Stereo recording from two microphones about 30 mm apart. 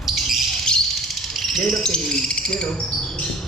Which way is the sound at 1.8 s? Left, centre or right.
Left.